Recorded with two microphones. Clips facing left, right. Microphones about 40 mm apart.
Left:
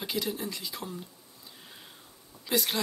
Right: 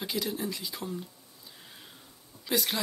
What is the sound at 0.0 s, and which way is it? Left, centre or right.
Speech, centre.